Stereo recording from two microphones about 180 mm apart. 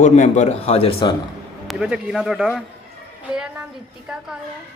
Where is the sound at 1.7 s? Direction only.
5° right (ahead or behind).